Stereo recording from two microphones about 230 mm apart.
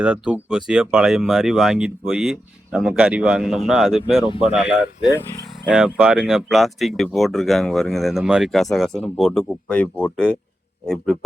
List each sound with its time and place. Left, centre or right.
0.0 s speech: centre
4.2 s speech: left
5.6 s speech: centre